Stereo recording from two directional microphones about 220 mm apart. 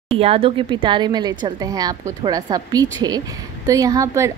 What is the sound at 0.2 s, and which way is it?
A woman's voice, 25° right (ahead or behind).